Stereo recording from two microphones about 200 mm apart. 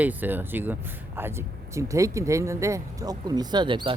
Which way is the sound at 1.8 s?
15° right (ahead or behind).